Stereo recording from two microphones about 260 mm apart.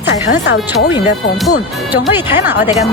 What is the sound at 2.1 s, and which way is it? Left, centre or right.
Speech, centre.